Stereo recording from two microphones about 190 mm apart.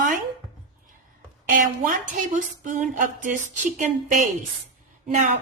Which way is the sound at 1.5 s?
45° right (ahead or behind).